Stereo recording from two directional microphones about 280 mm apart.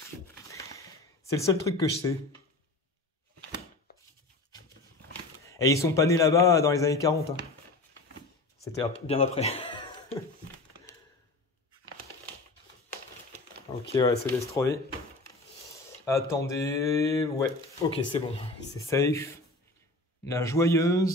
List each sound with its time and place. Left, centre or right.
0.0 s a sound: centre
1.3 s speech: centre
5.4 s speech: centre
8.7 s speech: left
14.0 s speech: centre
16.1 s speech: centre